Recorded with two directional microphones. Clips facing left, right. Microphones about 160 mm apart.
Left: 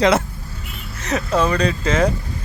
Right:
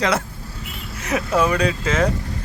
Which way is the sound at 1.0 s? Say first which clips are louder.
Even; 10° right (ahead or behind).